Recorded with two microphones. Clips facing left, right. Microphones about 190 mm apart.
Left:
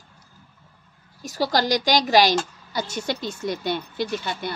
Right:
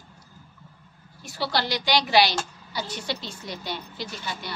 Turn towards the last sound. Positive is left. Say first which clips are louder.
# left 8 dB
turn(degrees=55)  # may be behind; listen again after turning